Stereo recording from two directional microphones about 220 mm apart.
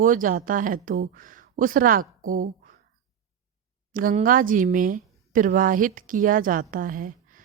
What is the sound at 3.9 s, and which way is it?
Speech, 40° right (ahead or behind).